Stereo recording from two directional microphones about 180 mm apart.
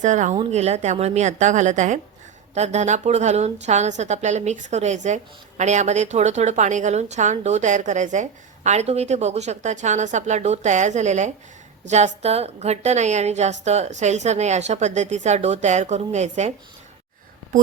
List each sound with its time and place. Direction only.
0.0 s a woman's voice: 40° right (ahead or behind)